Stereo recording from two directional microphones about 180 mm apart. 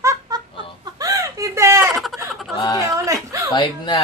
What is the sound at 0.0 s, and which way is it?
Giggle, 20° right (ahead or behind).